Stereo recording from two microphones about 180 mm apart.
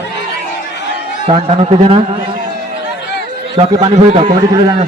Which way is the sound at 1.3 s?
30° right (ahead or behind).